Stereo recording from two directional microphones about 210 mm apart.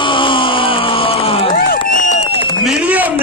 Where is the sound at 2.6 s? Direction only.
5° right (ahead or behind).